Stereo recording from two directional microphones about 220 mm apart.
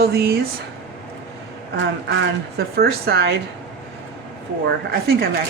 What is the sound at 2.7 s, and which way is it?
Speech, 45° right (ahead or behind).